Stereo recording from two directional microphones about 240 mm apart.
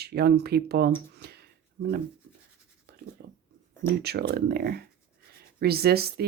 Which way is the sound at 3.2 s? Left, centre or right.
Right.